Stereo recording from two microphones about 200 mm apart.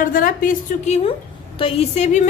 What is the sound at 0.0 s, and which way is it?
Speech, 45° left (ahead or behind).